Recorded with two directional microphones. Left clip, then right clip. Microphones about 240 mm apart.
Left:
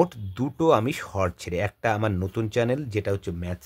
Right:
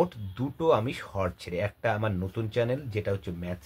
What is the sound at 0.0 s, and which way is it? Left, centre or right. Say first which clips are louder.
Speech: left 4 dB; left.